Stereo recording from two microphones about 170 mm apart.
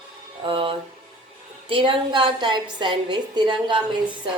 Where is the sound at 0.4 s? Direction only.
30° right (ahead or behind).